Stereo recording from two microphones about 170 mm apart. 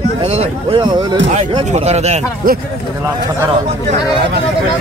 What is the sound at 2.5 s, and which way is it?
Speech, 60° right (ahead or behind).